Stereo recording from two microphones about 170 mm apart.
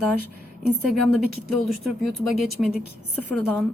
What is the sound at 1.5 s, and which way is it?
Speech, centre (ahead or behind).